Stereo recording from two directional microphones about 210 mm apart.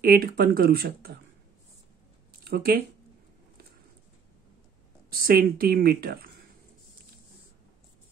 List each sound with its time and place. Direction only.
0.0 s speech: 45° right (ahead or behind)
2.4 s speech: 45° right (ahead or behind)
5.1 s speech: 45° right (ahead or behind)